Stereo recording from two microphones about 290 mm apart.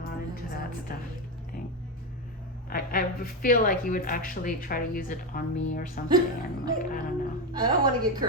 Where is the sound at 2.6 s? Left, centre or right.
Left.